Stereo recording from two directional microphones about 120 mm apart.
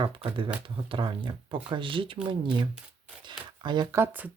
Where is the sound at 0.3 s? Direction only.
40° right (ahead or behind).